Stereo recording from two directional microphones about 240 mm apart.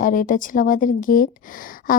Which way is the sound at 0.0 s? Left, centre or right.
Left.